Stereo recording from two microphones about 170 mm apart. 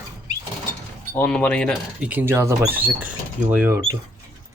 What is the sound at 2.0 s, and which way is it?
Speech, 10° right (ahead or behind).